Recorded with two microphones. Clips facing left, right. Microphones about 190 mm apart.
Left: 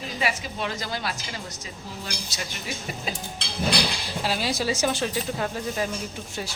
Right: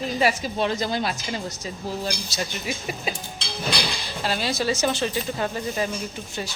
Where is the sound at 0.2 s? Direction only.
40° right (ahead or behind).